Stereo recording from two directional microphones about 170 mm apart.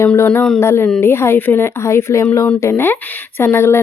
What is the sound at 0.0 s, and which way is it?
Speech, 10° left (ahead or behind).